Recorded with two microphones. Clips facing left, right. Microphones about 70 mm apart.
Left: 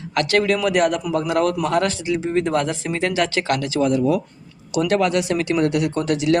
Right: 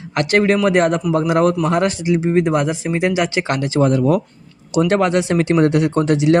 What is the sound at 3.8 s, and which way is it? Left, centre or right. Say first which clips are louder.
Speech: right 3 dB; right.